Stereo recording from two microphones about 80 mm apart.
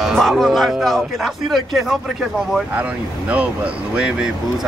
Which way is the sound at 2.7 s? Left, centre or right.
Centre.